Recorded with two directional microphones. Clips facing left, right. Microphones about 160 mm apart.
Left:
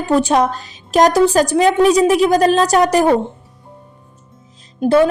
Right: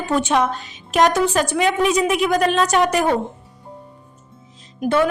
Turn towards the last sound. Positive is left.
turn(degrees=35)  # may be behind; listen again after turning